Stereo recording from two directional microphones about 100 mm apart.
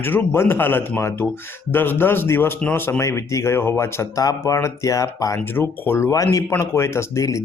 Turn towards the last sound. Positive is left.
turn(degrees=30)  # may be behind; listen again after turning